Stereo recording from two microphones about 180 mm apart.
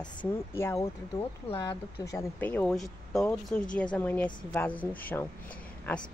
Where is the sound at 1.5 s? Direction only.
25° left (ahead or behind).